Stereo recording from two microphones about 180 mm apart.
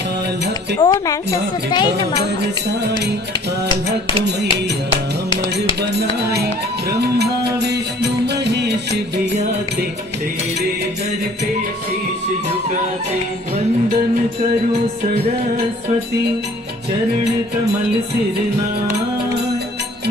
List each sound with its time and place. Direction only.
0.7 s a woman's voice: 20° left (ahead or behind)
5.8 s music: 65° right (ahead or behind)